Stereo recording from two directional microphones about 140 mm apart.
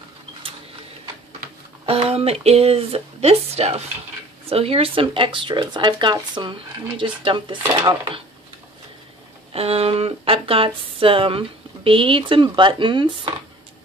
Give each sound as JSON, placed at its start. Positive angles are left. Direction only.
{"t": 1.9, "sound": "speech", "side_deg": -45}
{"t": 9.5, "sound": "speech", "side_deg": -45}